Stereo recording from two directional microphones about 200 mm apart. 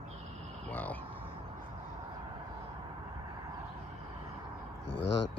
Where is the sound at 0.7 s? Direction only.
10° left (ahead or behind).